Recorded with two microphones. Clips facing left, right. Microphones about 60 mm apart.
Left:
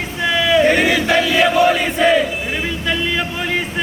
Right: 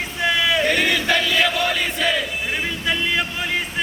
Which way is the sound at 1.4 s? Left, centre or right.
Left.